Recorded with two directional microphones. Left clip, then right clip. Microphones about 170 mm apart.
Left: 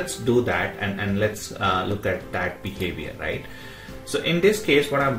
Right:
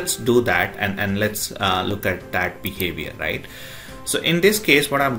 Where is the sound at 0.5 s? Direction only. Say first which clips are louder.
Right 5 dB; 15° right (ahead or behind).